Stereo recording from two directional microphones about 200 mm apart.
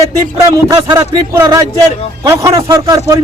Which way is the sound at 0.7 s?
15° right (ahead or behind).